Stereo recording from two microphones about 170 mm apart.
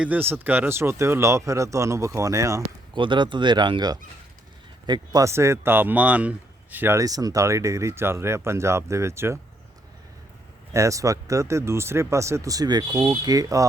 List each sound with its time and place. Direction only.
0.0 s speech: 10° right (ahead or behind)
10.7 s speech: 20° right (ahead or behind)